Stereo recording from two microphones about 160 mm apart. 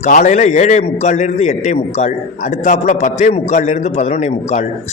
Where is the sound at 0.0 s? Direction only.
55° left (ahead or behind).